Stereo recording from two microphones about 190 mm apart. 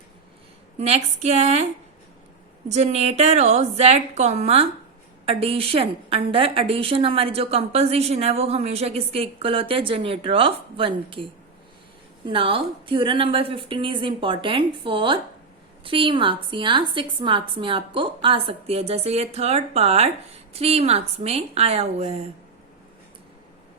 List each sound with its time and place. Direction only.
0.8 s a woman's voice: 35° right (ahead or behind)
2.6 s a woman's voice: 35° right (ahead or behind)